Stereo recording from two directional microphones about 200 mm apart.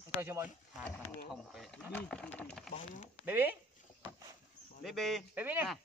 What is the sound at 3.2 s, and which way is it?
Speech, 10° right (ahead or behind).